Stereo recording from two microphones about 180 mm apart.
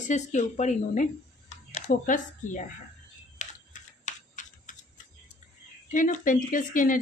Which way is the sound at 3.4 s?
45° left (ahead or behind).